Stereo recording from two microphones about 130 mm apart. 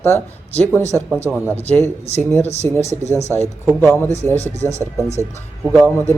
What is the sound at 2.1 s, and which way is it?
Speech, 55° left (ahead or behind).